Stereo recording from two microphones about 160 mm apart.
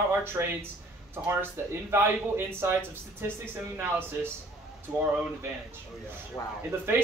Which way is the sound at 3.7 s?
15° right (ahead or behind).